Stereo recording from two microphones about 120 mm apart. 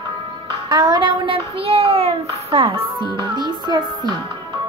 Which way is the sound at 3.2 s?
35° right (ahead or behind).